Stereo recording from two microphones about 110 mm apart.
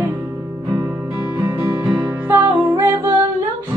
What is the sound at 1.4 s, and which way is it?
Music, 25° right (ahead or behind).